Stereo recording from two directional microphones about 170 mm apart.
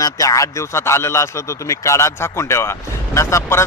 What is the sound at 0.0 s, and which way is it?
A man's voice, 20° left (ahead or behind).